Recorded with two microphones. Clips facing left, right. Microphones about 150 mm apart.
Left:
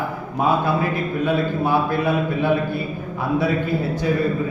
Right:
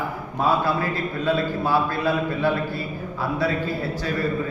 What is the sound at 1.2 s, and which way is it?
A man's voice, 20° left (ahead or behind).